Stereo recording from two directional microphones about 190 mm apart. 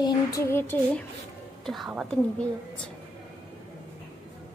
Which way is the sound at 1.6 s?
Centre (ahead or behind).